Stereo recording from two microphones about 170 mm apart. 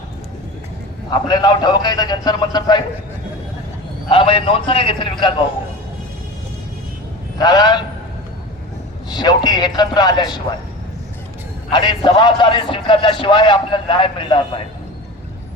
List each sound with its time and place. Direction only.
1.1 s a man's voice: 25° left (ahead or behind)
4.1 s a man's voice: 30° left (ahead or behind)
7.3 s a man's voice: 25° left (ahead or behind)
9.0 s a man's voice: 25° left (ahead or behind)
11.7 s a man's voice: 25° left (ahead or behind)